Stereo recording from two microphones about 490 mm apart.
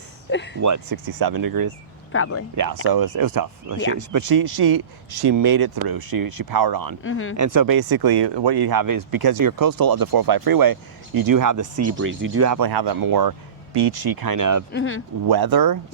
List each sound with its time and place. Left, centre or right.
0.3 s speech: left
0.6 s speech: right
2.1 s speech: left
2.8 s speech: right
7.0 s speech: left
7.3 s speech: right
14.7 s speech: left
15.3 s speech: right